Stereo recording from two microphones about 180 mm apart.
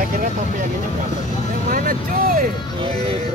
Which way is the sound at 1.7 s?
50° right (ahead or behind).